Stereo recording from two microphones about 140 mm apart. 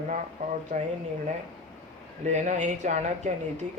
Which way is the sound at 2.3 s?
60° right (ahead or behind).